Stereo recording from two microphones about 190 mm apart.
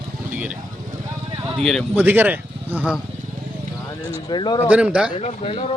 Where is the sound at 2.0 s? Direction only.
10° right (ahead or behind).